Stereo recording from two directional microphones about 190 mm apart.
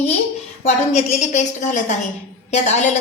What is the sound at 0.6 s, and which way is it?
A woman's voice, 40° left (ahead or behind).